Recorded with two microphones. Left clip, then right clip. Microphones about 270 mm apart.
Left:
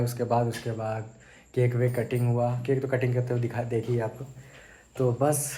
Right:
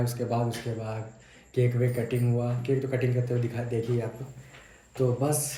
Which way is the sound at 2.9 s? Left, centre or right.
Centre.